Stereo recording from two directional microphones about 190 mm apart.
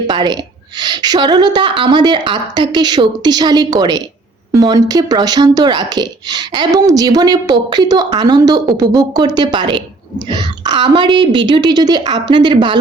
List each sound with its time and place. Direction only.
0.1 s speech: 20° right (ahead or behind)